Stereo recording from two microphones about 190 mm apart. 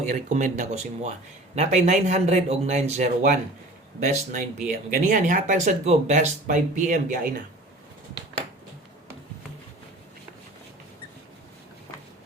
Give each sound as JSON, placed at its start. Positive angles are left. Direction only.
{"t": 0.1, "sound": "speech", "side_deg": -40}